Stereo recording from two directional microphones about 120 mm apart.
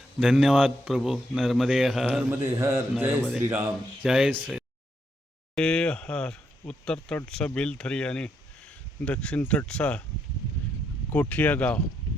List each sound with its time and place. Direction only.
0.2 s a man's voice: centre (ahead or behind)
2.4 s speech: 20° right (ahead or behind)
4.0 s a man's voice: 5° right (ahead or behind)
11.1 s speech: 10° left (ahead or behind)